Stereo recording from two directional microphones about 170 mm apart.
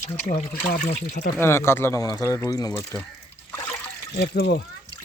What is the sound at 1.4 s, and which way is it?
Speech, 15° left (ahead or behind).